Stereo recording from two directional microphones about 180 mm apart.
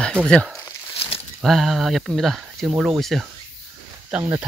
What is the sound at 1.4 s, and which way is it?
Speech, centre (ahead or behind).